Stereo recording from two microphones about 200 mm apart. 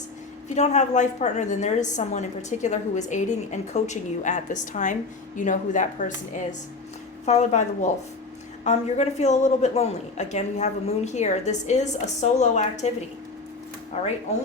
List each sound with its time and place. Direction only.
0.4 s a woman's voice: 35° left (ahead or behind)
13.9 s a woman's voice: 30° left (ahead or behind)